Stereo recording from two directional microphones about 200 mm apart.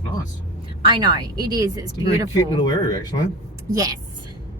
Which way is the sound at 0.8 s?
25° right (ahead or behind).